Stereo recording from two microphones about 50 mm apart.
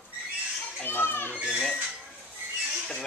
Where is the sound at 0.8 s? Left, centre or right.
Left.